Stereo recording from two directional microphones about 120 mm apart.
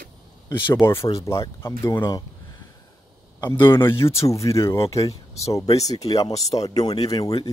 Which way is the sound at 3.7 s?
20° left (ahead or behind).